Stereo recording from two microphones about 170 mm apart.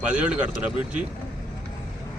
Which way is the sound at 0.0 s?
5° right (ahead or behind).